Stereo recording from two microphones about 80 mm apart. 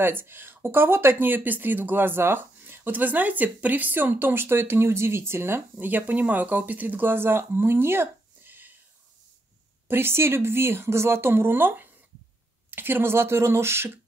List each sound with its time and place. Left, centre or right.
0.0 s speech: right
9.8 s speech: right